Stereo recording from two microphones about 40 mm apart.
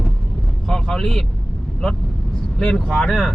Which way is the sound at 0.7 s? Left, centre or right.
Centre.